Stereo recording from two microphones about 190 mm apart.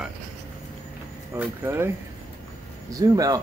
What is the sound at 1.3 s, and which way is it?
Speech, 10° right (ahead or behind).